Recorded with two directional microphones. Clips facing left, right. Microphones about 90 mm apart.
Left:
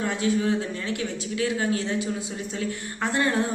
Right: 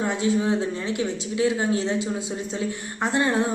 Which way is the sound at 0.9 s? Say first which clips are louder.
Right 4 dB; 20° right (ahead or behind).